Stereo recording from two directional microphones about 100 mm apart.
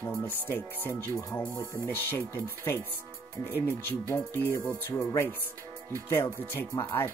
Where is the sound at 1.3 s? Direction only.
20° left (ahead or behind).